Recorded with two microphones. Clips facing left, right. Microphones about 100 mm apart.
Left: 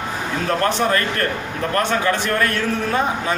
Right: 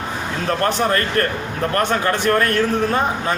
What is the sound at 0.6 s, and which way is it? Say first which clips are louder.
A man's voice: right 1 dB; 40° right (ahead or behind).